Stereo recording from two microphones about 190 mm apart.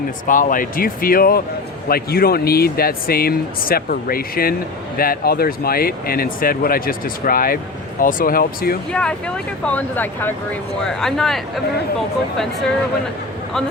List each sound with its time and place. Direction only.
0.3 s speech: 45° left (ahead or behind)
8.9 s speech: 5° left (ahead or behind)